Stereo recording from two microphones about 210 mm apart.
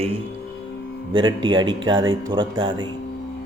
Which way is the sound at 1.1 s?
20° right (ahead or behind).